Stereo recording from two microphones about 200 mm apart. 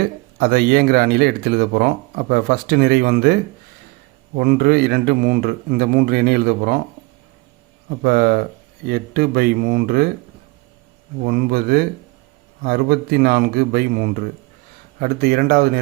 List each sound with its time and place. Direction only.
0.3 s speech: 50° right (ahead or behind)
4.4 s speech: 50° right (ahead or behind)
7.9 s speech: 45° right (ahead or behind)
11.3 s speech: 50° right (ahead or behind)